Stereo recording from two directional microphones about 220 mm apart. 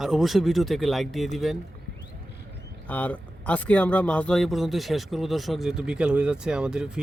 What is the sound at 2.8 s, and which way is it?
Speech, 5° left (ahead or behind).